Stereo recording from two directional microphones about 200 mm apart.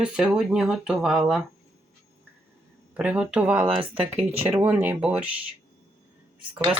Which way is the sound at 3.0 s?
5° right (ahead or behind).